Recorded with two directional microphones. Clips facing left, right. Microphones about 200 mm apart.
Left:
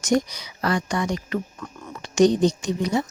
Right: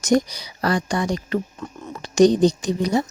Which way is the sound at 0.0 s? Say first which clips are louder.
Right 3 dB; 35° right (ahead or behind).